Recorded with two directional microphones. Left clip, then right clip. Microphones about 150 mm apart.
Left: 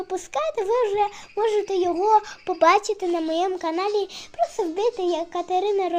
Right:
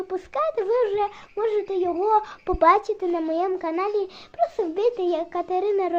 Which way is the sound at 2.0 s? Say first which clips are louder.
Left 2 dB; 10° right (ahead or behind).